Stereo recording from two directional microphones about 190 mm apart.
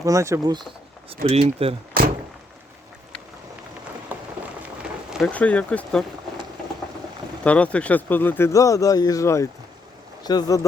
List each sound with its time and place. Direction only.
0.0 s speech: 15° right (ahead or behind)
1.1 s speech: 30° right (ahead or behind)
5.1 s speech: 5° left (ahead or behind)
7.4 s speech: 5° left (ahead or behind)